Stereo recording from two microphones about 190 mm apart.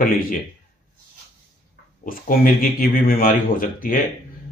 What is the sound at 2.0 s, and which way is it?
Speech, 45° left (ahead or behind).